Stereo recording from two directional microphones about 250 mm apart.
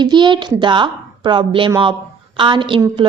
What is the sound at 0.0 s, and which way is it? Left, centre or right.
A woman's voice, centre.